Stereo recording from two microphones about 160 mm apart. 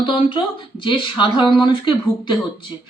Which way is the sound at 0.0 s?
30° left (ahead or behind).